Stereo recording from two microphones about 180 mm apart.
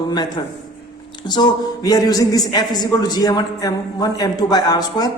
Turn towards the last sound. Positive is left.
turn(degrees=20)  # may be behind; listen again after turning